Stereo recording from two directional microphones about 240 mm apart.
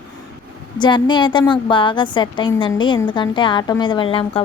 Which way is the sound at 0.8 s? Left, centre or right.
Centre.